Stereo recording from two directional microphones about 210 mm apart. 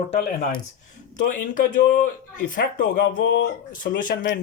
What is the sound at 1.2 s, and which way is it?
Speech, 40° left (ahead or behind).